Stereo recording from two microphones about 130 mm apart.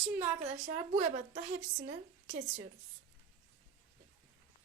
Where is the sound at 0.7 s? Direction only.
70° right (ahead or behind).